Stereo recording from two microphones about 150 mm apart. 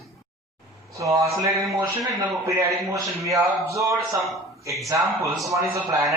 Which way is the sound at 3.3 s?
20° right (ahead or behind).